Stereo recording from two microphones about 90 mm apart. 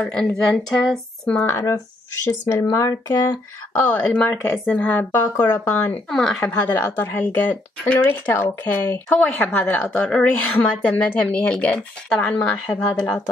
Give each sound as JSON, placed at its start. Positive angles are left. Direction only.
{"t": 0.0, "sound": "speech", "side_deg": 10}
{"t": 2.2, "sound": "speech", "side_deg": 30}
{"t": 3.7, "sound": "speech", "side_deg": 15}
{"t": 6.0, "sound": "speech", "side_deg": 5}
{"t": 6.4, "sound": "speech", "side_deg": 20}